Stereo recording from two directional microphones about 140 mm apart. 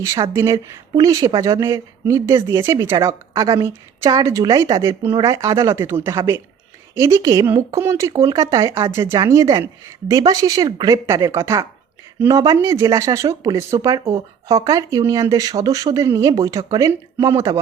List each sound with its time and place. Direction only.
0.0 s speech: 20° right (ahead or behind)